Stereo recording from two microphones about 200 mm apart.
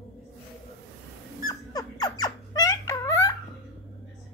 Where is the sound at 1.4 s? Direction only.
20° left (ahead or behind).